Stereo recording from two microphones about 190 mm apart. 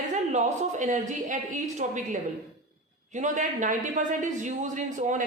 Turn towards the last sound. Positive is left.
turn(degrees=-40)  # may be behind; listen again after turning